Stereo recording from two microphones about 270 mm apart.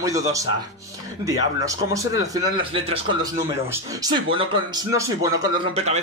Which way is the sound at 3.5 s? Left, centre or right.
Centre.